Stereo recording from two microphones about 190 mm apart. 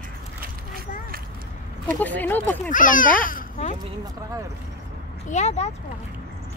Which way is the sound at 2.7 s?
45° left (ahead or behind).